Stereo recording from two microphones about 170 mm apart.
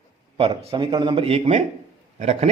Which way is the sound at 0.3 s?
35° right (ahead or behind).